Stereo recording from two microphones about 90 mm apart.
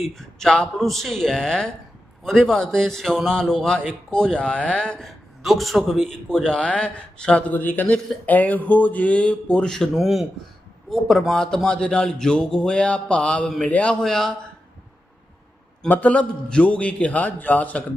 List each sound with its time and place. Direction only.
0.1 s a man's voice: 5° left (ahead or behind)
14.0 s a man's voice: 5° left (ahead or behind)
15.9 s a man's voice: 15° left (ahead or behind)